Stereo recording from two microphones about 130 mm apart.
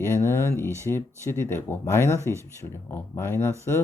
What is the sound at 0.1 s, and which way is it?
Speech, 20° left (ahead or behind).